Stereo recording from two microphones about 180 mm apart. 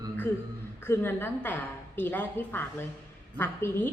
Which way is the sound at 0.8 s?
10° left (ahead or behind).